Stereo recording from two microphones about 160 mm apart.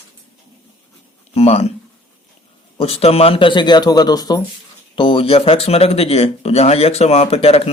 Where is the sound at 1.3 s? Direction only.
40° left (ahead or behind).